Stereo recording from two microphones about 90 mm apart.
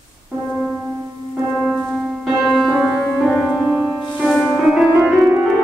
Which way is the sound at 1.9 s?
5° right (ahead or behind).